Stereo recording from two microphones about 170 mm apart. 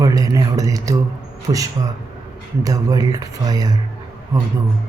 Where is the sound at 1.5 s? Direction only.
35° right (ahead or behind).